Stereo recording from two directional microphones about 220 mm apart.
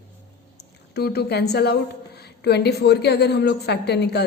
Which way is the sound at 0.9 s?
45° left (ahead or behind).